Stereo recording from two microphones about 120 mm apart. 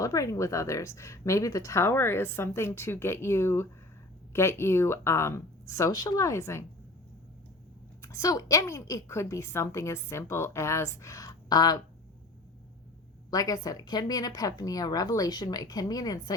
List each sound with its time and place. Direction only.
0.0 s a woman's voice: 25° left (ahead or behind)
8.0 s a woman's voice: 25° left (ahead or behind)
13.3 s a woman's voice: 30° left (ahead or behind)